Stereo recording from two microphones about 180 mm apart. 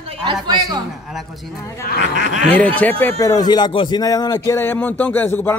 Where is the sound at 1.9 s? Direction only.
80° left.